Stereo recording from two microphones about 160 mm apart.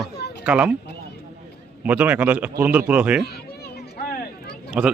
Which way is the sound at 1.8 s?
10° right (ahead or behind).